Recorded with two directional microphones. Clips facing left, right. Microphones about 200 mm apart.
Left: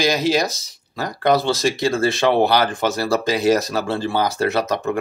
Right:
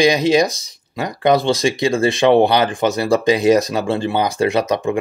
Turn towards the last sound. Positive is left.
turn(degrees=-15)  # may be behind; listen again after turning